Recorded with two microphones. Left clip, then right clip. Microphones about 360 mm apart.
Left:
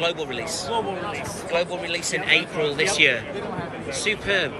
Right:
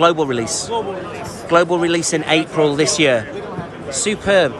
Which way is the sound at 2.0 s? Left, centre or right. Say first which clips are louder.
Right 4 dB; centre.